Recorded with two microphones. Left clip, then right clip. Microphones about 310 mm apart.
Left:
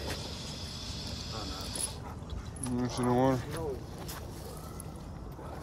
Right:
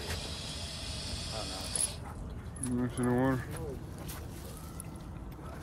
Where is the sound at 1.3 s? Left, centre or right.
Right.